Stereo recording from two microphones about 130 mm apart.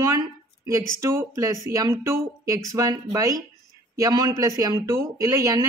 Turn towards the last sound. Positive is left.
turn(degrees=-25)  # may be behind; listen again after turning